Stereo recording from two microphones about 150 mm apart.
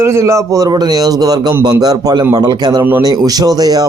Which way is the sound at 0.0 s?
20° right (ahead or behind).